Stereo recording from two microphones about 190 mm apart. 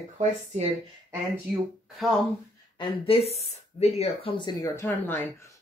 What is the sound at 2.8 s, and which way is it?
Speech, 30° left (ahead or behind).